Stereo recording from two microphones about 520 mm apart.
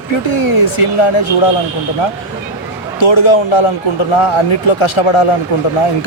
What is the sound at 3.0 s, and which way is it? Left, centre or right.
Speech, left.